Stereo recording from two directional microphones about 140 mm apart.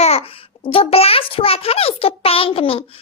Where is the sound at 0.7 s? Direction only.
45° left (ahead or behind).